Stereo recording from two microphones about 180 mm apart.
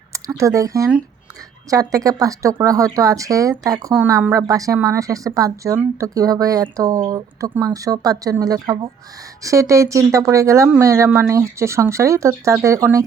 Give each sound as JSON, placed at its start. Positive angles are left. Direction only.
{"t": 0.1, "sound": "speech", "side_deg": -15}